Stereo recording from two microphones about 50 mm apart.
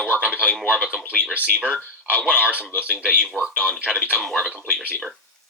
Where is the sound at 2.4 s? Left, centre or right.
Right.